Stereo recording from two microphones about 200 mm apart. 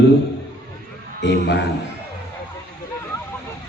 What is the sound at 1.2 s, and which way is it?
Speech, 60° left (ahead or behind).